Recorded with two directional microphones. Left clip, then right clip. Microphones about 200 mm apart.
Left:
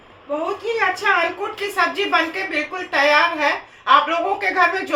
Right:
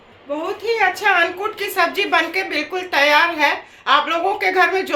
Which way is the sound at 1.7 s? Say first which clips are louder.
Right 1 dB; 45° right (ahead or behind).